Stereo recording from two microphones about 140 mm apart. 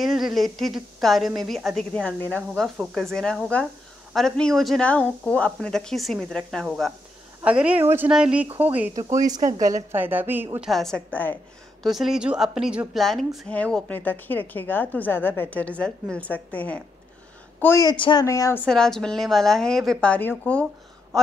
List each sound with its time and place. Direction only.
0.0 s a woman's voice: centre (ahead or behind); by 2.4 s 15° left (ahead or behind)
2.5 s speech: centre (ahead or behind)
7.4 s speech: 10° right (ahead or behind)
8.9 s speech: 25° right (ahead or behind)
9.9 s speech: 15° right (ahead or behind)
10.7 s a woman's voice: 5° left (ahead or behind)
11.8 s a woman's voice: centre (ahead or behind); by 17.8 s 15° left (ahead or behind)
17.8 s speech: 35° left (ahead or behind)
18.2 s a woman's voice: 20° left (ahead or behind)
18.7 s speech: 5° left (ahead or behind)